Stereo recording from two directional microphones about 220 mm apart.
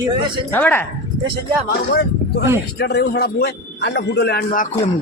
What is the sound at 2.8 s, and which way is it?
A man's voice, 45° left (ahead or behind).